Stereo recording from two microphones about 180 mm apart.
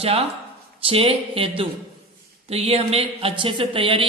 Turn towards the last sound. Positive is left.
turn(degrees=-30)  # may be behind; listen again after turning